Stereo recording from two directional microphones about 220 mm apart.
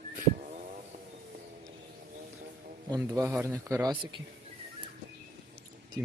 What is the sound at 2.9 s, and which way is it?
A man's voice, 15° right (ahead or behind).